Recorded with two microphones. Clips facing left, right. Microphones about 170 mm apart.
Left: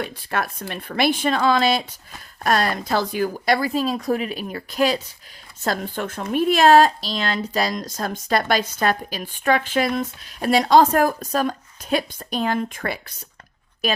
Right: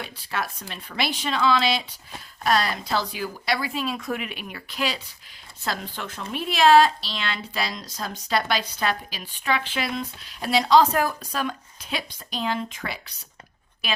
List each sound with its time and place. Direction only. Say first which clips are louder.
0.0 s speech: left 5 dB; 55° left (ahead or behind)